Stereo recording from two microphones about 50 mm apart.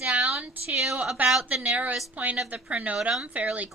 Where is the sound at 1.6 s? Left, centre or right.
Right.